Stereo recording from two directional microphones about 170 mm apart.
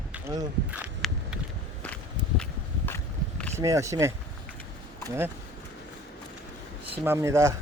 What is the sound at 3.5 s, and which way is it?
Speech, 20° right (ahead or behind).